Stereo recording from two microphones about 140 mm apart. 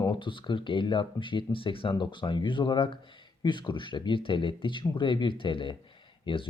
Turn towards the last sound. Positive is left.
turn(degrees=35)  # may be behind; listen again after turning